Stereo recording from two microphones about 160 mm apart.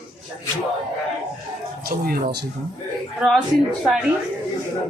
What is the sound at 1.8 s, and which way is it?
Speech, 65° right (ahead or behind).